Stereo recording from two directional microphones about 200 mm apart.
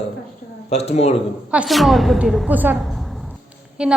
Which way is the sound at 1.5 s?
5° right (ahead or behind).